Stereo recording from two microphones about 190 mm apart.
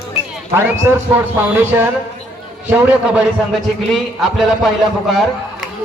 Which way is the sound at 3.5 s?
Centre (ahead or behind).